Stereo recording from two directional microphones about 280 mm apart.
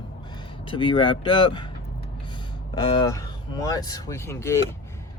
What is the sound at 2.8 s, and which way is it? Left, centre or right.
Speech, centre.